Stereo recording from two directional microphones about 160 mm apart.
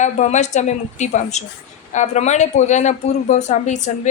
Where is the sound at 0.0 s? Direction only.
45° left (ahead or behind).